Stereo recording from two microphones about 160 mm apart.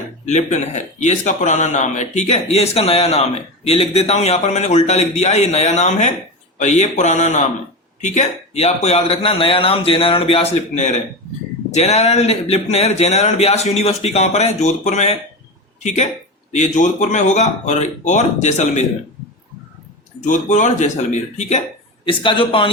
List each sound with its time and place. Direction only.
0.3 s a man's voice: 45° left (ahead or behind)
20.2 s a man's voice: 50° left (ahead or behind)
22.0 s speech: 30° left (ahead or behind)